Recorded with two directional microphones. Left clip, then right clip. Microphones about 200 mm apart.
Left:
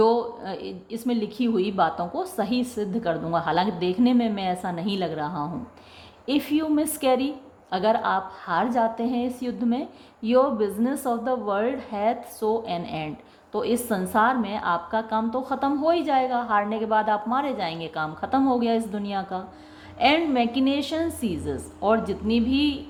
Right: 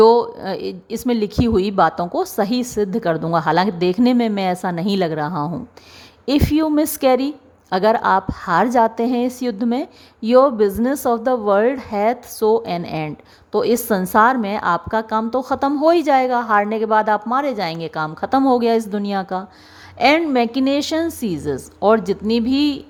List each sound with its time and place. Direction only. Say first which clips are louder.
0.0 s a woman's voice: right 9 dB; 40° right (ahead or behind)